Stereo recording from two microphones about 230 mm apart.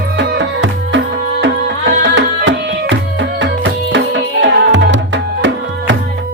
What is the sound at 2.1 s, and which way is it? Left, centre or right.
Music, right.